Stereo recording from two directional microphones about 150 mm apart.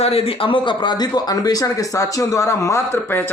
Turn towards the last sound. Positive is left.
turn(degrees=15)  # may be behind; listen again after turning